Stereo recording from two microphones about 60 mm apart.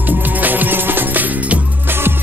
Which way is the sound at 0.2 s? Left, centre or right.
Right.